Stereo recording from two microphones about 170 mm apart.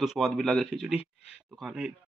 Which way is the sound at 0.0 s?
Centre (ahead or behind).